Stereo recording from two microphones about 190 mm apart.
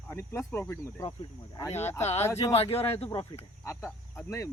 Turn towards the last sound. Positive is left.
turn(degrees=15)  # may be behind; listen again after turning